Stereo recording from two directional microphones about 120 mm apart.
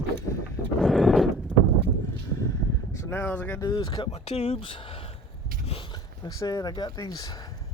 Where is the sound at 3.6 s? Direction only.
35° left (ahead or behind).